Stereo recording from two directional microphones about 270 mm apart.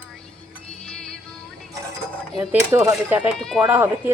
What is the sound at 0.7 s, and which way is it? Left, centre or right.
Music, centre.